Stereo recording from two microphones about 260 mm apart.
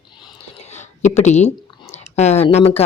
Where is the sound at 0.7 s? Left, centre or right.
Left.